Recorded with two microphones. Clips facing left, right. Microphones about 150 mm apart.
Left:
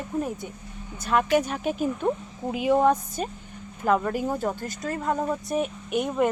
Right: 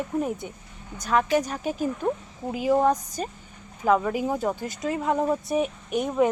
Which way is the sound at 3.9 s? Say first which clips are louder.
Right 1 dB; 10° right (ahead or behind).